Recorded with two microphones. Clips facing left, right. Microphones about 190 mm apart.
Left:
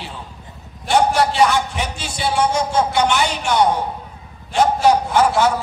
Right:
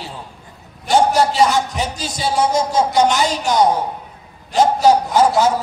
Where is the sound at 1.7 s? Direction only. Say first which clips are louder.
Right 3 dB; 40° right (ahead or behind).